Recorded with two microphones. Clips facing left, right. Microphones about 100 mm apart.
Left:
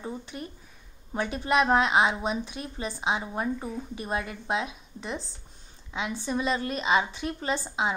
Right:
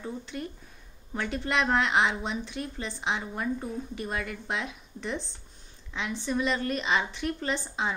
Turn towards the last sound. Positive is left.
turn(degrees=10)  # may be behind; listen again after turning